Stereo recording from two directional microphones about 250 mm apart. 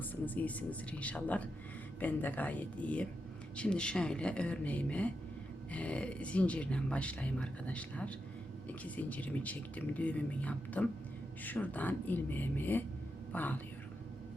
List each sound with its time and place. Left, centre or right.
0.0 s speech: centre